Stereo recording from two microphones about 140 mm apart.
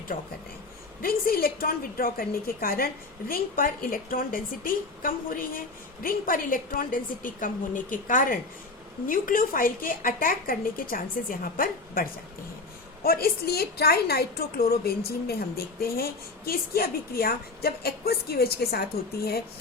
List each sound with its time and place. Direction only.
0.1 s speech: 80° left
1.0 s a woman's voice: 90° left